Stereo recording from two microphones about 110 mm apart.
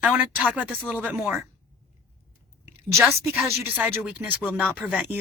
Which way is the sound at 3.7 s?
10° right (ahead or behind).